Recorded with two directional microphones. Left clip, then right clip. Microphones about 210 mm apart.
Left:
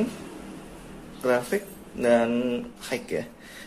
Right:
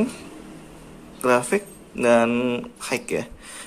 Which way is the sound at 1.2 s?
25° right (ahead or behind).